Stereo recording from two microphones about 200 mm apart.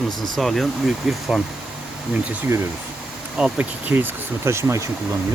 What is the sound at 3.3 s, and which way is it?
Speech, 5° right (ahead or behind).